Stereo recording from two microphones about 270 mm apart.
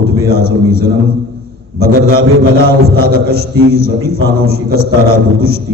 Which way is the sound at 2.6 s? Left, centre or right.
Right.